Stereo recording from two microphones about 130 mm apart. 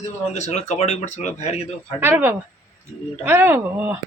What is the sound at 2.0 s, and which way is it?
Speech, 15° right (ahead or behind).